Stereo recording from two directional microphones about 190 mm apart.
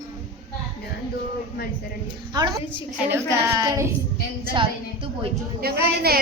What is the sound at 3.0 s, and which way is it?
Child singing, 15° right (ahead or behind).